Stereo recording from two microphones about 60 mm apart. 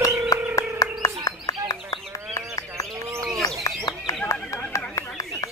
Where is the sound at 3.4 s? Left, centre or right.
Left.